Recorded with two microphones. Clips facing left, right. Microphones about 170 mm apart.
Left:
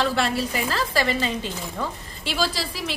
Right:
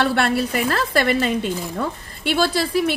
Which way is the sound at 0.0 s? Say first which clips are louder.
Right 4 dB; 65° right (ahead or behind).